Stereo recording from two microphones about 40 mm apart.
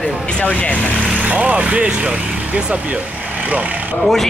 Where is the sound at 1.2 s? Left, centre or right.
Right.